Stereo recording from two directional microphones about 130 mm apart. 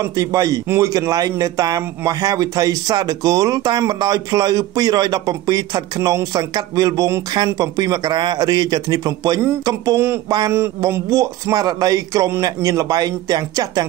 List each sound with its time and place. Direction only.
0.0 s a man's voice: 25° right (ahead or behind)